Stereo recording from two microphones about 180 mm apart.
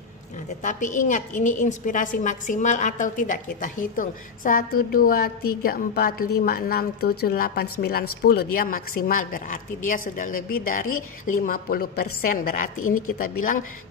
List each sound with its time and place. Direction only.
0.7 s a woman's voice: 45° left (ahead or behind)